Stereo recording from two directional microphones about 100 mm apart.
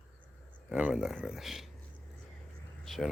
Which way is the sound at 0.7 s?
15° right (ahead or behind).